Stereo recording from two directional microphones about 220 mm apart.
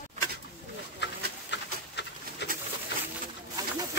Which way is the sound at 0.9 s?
50° left (ahead or behind).